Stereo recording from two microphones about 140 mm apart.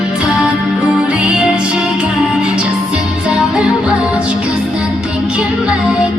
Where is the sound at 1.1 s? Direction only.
5° right (ahead or behind).